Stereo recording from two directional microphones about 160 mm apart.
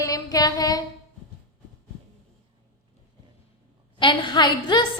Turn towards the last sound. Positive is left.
turn(degrees=30)  # may be behind; listen again after turning